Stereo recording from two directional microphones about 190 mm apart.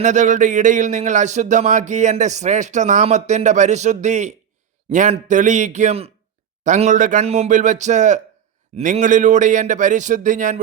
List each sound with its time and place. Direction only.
0.0 s speech: 40° right (ahead or behind)